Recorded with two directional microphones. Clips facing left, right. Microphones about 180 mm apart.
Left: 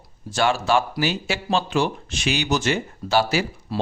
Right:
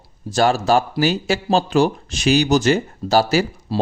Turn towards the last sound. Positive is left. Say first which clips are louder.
# right 5 dB
turn(degrees=-40)  # may be behind; listen again after turning